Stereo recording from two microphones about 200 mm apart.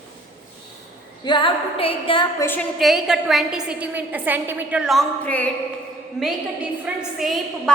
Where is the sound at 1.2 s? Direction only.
25° left (ahead or behind).